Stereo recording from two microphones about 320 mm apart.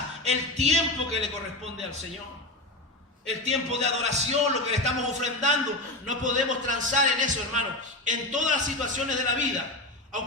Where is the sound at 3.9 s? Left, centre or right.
Right.